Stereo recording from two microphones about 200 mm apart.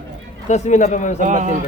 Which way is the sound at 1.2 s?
40° right (ahead or behind).